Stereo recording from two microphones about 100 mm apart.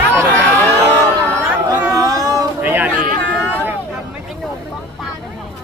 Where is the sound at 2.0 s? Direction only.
40° right (ahead or behind).